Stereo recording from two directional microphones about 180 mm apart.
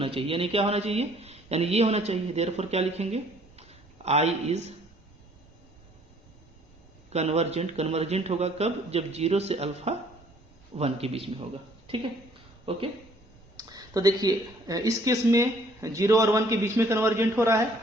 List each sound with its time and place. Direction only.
0.0 s a man's voice: 30° right (ahead or behind)
3.6 s a sound: 35° right (ahead or behind)
7.1 s a man's voice: 35° right (ahead or behind); by 17.6 s 15° right (ahead or behind)